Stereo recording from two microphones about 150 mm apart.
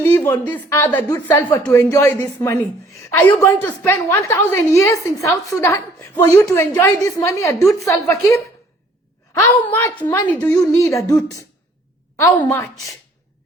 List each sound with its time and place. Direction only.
0.0 s a woman's voice: 15° left (ahead or behind)
9.6 s a woman's voice: 10° left (ahead or behind)
10.6 s a woman's voice: 20° left (ahead or behind)
12.2 s a woman's voice: 15° left (ahead or behind)